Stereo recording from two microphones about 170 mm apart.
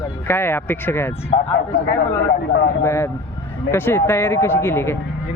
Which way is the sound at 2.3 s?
80° left.